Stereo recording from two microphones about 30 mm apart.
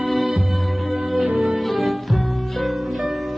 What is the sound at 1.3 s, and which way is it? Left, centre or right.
Music, centre.